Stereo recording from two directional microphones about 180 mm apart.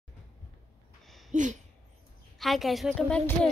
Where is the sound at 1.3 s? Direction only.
45° right (ahead or behind).